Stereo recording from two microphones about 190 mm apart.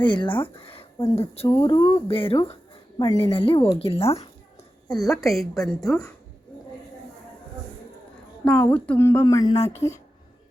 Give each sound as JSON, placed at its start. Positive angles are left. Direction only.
{"t": 0.0, "sound": "speech", "side_deg": 25}
{"t": 1.5, "sound": "a woman's voice", "side_deg": 20}
{"t": 4.9, "sound": "a woman's voice", "side_deg": 20}
{"t": 5.2, "sound": "a woman's voice", "side_deg": 0}
{"t": 8.4, "sound": "speech", "side_deg": 5}